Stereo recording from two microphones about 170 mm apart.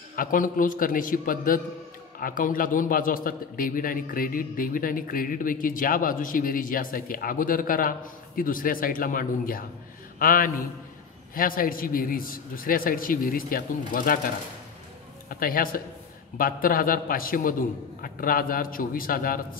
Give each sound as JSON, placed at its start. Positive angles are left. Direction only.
{"t": 0.1, "sound": "a man's voice", "side_deg": 55}
{"t": 15.2, "sound": "a man's voice", "side_deg": 55}